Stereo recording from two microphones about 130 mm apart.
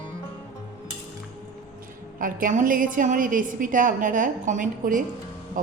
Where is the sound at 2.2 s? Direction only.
90° right.